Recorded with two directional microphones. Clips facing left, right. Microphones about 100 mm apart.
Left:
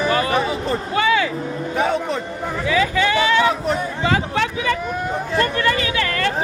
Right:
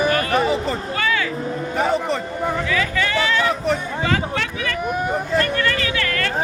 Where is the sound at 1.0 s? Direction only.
20° left (ahead or behind).